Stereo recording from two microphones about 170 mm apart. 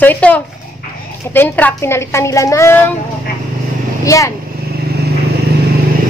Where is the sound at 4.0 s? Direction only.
20° left (ahead or behind).